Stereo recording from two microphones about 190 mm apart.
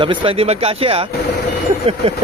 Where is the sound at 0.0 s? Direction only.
30° right (ahead or behind).